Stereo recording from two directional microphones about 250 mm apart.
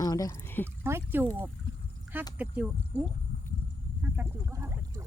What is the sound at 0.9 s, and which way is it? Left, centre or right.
Speech, centre.